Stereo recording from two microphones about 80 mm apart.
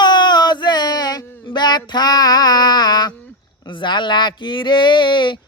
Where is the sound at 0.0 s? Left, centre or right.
Left.